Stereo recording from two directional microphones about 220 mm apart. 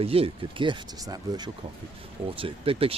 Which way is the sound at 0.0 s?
25° right (ahead or behind).